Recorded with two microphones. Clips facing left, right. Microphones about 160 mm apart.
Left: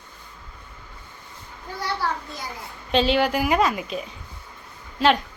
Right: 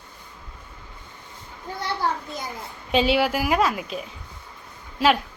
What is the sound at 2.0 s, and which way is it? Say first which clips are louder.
Speech: right 2 dB; 20° right (ahead or behind).